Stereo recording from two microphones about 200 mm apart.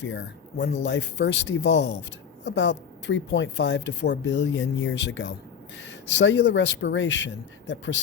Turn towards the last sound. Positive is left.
turn(degrees=65)  # may be behind; listen again after turning